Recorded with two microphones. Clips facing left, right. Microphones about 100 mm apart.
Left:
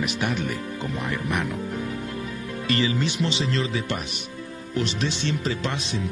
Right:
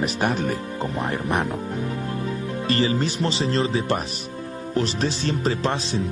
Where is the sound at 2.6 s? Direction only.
35° right (ahead or behind).